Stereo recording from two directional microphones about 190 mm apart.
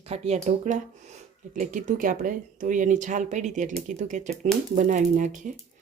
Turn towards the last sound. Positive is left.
turn(degrees=-40)  # may be behind; listen again after turning